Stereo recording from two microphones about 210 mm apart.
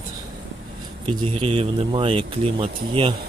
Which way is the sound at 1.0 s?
25° right (ahead or behind).